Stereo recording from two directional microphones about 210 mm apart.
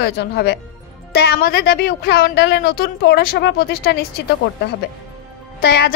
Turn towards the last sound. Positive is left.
turn(degrees=50)  # may be behind; listen again after turning